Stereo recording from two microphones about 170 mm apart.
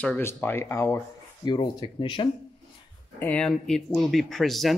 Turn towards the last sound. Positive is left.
turn(degrees=0)  # may be behind; listen again after turning